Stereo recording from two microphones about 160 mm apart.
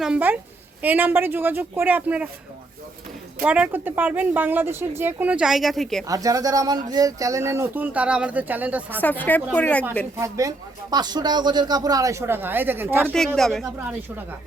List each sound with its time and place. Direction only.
0.0 s speech: 10° right (ahead or behind)
3.4 s speech: 10° right (ahead or behind)
6.1 s speech: 20° right (ahead or behind)
9.0 s speech: 10° left (ahead or behind)
10.2 s speech: 20° right (ahead or behind)
13.1 s speech: 5° left (ahead or behind)